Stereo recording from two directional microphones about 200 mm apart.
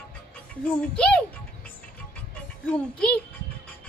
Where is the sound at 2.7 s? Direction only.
5° left (ahead or behind).